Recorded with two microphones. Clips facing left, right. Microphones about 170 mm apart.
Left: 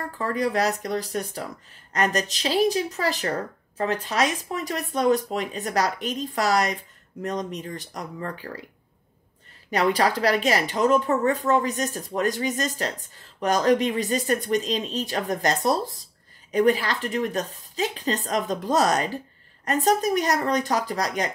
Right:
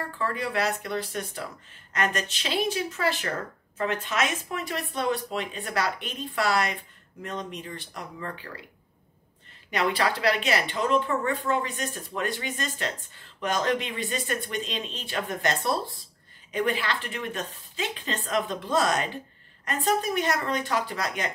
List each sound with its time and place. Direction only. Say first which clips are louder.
0.2 s speech: left 5 dB; 40° left (ahead or behind)
9.7 s speech: left 4 dB; 40° left (ahead or behind)